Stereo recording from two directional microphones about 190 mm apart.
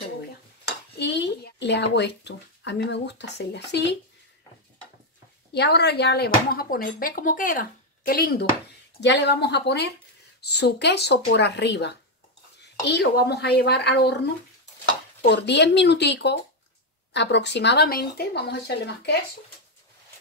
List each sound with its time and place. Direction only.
0.9 s speech: 65° left (ahead or behind)
5.5 s speech: 60° left (ahead or behind)
9.0 s speech: 65° left (ahead or behind)